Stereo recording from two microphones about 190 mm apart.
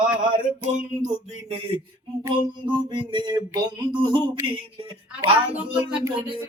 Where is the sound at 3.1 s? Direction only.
25° right (ahead or behind).